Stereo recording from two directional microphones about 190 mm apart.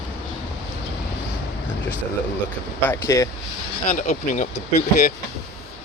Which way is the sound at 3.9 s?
45° left (ahead or behind).